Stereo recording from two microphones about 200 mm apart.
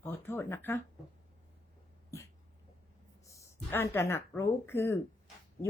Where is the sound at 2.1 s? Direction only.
15° left (ahead or behind).